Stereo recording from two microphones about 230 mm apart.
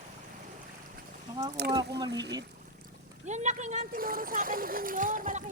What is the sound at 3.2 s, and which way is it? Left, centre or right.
A child's voice, right.